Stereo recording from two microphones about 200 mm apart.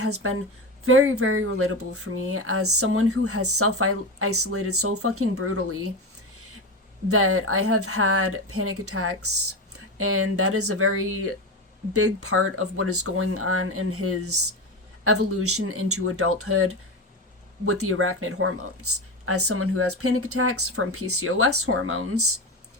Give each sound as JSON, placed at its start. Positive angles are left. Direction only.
{"t": 0.0, "sound": "speech", "side_deg": -90}
{"t": 7.1, "sound": "speech", "side_deg": -90}